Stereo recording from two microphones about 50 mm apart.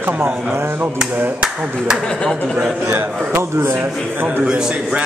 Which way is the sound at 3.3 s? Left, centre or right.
Right.